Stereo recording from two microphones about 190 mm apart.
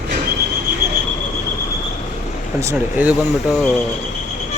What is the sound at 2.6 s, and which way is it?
Speech, 10° right (ahead or behind).